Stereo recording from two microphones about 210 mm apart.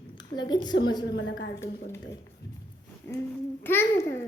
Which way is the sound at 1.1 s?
60° left (ahead or behind).